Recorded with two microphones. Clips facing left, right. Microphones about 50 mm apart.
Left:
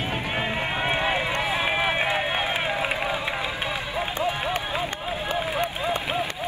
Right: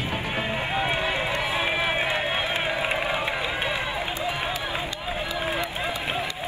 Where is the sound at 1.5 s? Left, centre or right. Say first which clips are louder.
Left 2 dB; centre.